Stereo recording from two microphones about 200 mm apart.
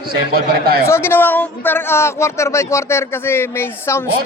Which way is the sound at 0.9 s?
10° left (ahead or behind).